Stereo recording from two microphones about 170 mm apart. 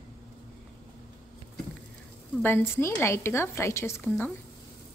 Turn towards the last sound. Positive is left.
turn(degrees=15)  # may be behind; listen again after turning